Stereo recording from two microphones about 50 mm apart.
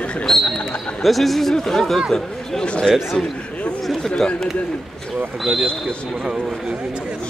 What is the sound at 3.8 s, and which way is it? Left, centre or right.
Speech, centre.